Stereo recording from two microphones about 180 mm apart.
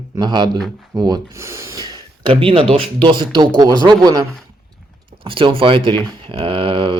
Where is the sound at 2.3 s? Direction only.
30° right (ahead or behind).